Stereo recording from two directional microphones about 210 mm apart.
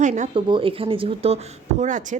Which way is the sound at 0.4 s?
25° right (ahead or behind).